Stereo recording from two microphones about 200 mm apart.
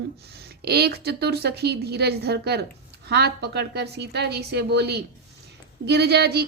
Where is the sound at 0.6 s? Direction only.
50° right (ahead or behind).